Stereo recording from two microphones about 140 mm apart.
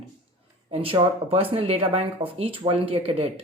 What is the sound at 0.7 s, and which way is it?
Speech, 45° right (ahead or behind).